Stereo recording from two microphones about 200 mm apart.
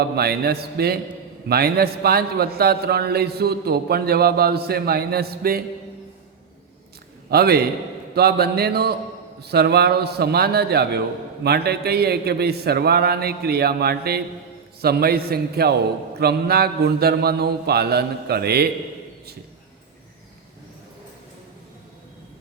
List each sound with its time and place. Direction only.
0.0 s a man's voice: 50° right (ahead or behind)
7.3 s a man's voice: 50° right (ahead or behind)